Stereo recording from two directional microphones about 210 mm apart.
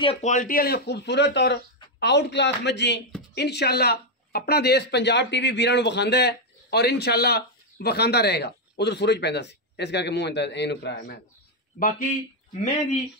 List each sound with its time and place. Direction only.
0.0 s speech: 30° left (ahead or behind); by 11.1 s 50° left (ahead or behind)
11.8 s speech: 40° left (ahead or behind)